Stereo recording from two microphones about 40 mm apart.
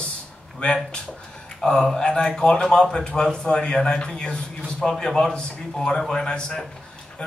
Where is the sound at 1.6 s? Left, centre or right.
Left.